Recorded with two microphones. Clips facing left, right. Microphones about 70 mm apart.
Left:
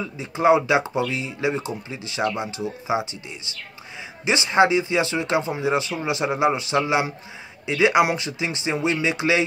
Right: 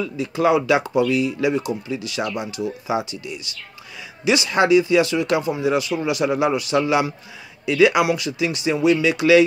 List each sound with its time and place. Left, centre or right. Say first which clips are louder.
0.0 s speech: right 1 dB; left